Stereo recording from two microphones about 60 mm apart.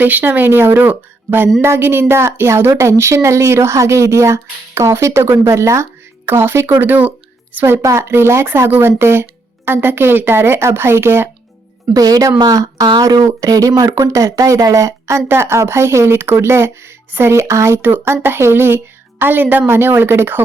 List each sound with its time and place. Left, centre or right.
0.0 s a woman's voice: right
6.2 s a woman's voice: right
6.7 s speech: right
7.6 s a woman's voice: right
11.9 s a woman's voice: right
15.3 s a woman's voice: right